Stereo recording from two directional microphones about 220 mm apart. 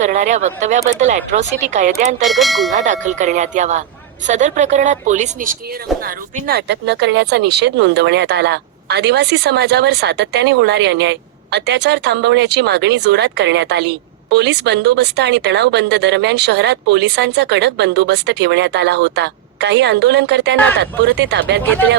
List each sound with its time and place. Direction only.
0.0 s speech: 35° right (ahead or behind)
2.2 s speech: centre (ahead or behind)
2.7 s speech: 35° right (ahead or behind); by 21.6 s 50° right (ahead or behind)
21.6 s speech: 10° left (ahead or behind)